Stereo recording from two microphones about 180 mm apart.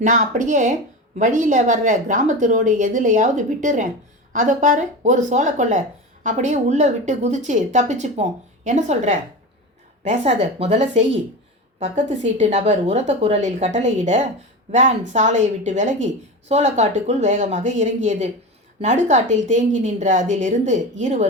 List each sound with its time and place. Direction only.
0.0 s a woman's voice: 45° right (ahead or behind)